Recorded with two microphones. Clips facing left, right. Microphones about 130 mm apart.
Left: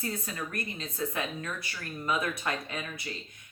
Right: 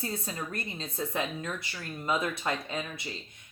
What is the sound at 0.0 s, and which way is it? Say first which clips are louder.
Speech: even; 25° right (ahead or behind).